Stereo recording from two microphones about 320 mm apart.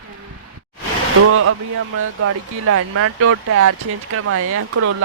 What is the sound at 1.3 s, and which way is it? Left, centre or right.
Speech, right.